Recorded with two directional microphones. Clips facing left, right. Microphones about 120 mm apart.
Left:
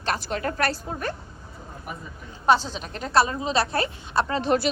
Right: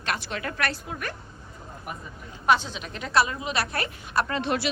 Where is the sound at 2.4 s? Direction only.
30° left (ahead or behind).